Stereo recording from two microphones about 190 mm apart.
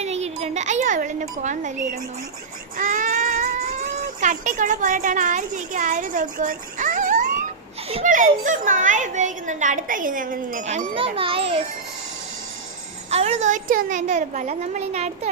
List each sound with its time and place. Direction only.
0.0 s a sound: 35° right (ahead or behind)
2.7 s a child's voice: 45° right (ahead or behind)
13.1 s a woman's voice: 35° right (ahead or behind)